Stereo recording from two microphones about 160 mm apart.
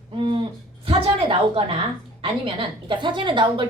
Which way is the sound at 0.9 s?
35° right (ahead or behind).